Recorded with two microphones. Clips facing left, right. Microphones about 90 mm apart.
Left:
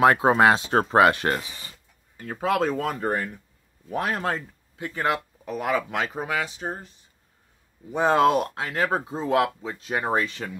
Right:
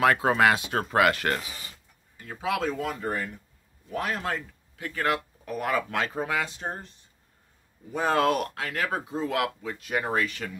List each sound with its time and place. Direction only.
0.0 s speech: 25° left (ahead or behind)
2.1 s speech: 45° left (ahead or behind)
4.7 s speech: 25° left (ahead or behind); by 6.9 s 5° left (ahead or behind)
7.9 s speech: 20° left (ahead or behind)